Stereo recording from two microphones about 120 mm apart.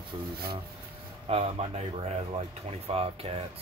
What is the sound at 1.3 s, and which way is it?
Speech, 60° right (ahead or behind).